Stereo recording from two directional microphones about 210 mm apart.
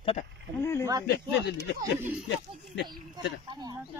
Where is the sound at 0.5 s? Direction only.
10° left (ahead or behind).